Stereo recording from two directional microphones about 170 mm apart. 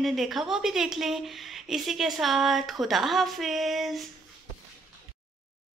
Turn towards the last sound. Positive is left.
turn(degrees=0)  # may be behind; listen again after turning